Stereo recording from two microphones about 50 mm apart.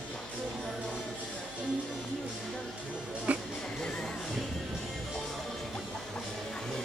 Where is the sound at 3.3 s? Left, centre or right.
Right.